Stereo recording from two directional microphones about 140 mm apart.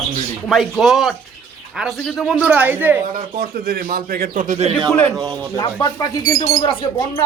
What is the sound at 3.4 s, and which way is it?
A man's voice, 90° right.